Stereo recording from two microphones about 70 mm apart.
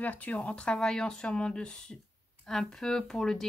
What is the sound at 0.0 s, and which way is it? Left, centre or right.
Speech, left.